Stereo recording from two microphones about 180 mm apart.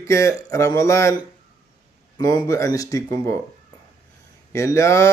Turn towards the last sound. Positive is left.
turn(degrees=15)  # may be behind; listen again after turning